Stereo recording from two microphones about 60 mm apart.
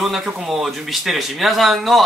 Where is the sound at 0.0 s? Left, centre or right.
Centre.